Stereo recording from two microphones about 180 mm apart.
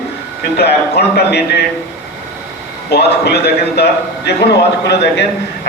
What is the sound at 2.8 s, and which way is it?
A man's voice, 65° left (ahead or behind).